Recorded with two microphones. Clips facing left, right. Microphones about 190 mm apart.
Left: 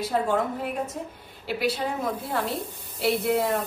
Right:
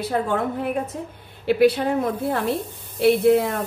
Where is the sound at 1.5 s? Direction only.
60° right (ahead or behind).